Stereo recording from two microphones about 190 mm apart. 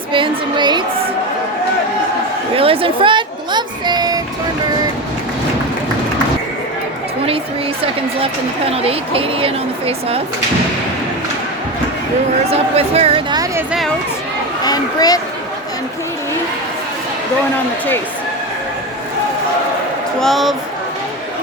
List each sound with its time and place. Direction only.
0.1 s a sound: 25° right (ahead or behind)
2.6 s speech: 30° right (ahead or behind)
8.2 s a woman's voice: 30° right (ahead or behind)
12.5 s speech: 35° right (ahead or behind)
14.6 s speech: 20° left (ahead or behind)
20.1 s speech: centre (ahead or behind)